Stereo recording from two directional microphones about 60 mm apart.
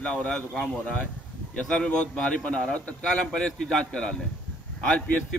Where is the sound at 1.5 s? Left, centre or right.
Centre.